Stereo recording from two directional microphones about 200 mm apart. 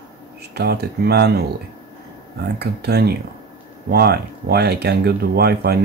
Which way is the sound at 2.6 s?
55° right (ahead or behind).